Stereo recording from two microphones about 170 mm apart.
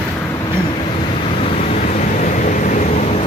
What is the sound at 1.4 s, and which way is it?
Vehicle, 35° left (ahead or behind).